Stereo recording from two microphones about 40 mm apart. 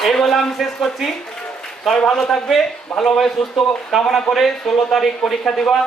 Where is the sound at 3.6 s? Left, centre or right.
Left.